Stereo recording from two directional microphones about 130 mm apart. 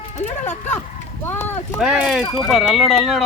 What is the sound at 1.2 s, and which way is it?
Speech, 15° left (ahead or behind).